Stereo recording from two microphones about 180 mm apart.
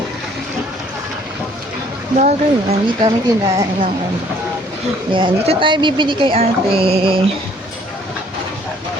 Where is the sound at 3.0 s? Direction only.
20° right (ahead or behind).